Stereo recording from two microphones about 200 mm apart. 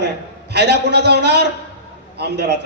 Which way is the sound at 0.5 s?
60° right (ahead or behind).